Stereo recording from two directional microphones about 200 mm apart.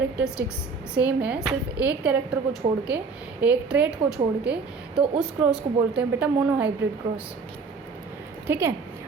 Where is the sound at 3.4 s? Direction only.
5° right (ahead or behind).